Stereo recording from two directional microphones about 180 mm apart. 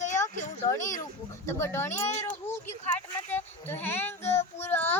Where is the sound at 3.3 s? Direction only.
10° left (ahead or behind).